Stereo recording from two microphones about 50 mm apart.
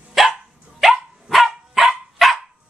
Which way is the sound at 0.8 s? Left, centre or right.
Centre.